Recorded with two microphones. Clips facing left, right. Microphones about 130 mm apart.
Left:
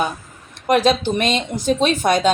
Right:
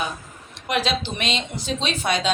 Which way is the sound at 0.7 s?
50° left (ahead or behind).